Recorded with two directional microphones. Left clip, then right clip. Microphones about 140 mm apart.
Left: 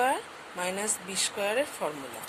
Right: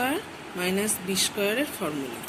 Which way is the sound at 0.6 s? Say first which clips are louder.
Right 4 dB; 60° left (ahead or behind).